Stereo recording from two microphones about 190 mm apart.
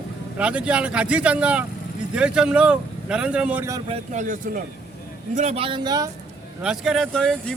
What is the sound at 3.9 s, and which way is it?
Speech, 40° right (ahead or behind).